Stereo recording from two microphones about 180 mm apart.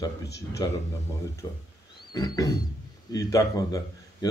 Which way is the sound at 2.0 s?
20° left (ahead or behind).